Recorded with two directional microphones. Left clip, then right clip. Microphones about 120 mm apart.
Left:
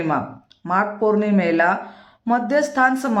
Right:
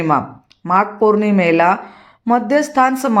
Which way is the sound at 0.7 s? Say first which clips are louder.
Right 5 dB; 30° right (ahead or behind).